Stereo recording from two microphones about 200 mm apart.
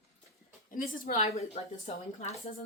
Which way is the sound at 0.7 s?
45° left (ahead or behind).